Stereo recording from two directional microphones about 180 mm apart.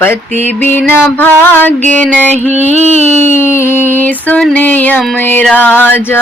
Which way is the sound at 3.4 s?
15° left (ahead or behind).